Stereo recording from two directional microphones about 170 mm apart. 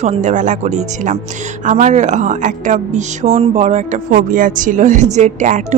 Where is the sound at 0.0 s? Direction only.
45° right (ahead or behind).